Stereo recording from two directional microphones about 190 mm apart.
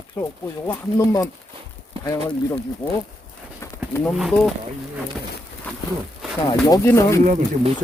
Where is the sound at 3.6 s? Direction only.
15° left (ahead or behind).